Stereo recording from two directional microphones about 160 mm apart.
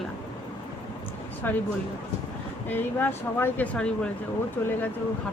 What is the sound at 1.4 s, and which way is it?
Speech, 10° left (ahead or behind).